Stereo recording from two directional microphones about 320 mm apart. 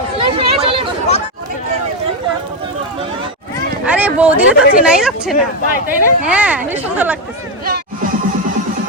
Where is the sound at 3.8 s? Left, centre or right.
Centre.